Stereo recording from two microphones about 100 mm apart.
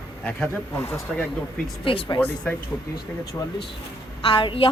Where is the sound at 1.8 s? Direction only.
60° left (ahead or behind).